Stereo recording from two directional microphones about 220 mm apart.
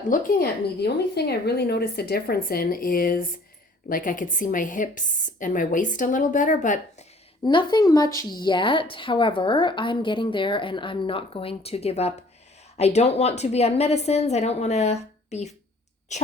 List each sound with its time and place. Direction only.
0.0 s a woman's voice: 40° left (ahead or behind)
7.4 s a woman's voice: 20° left (ahead or behind)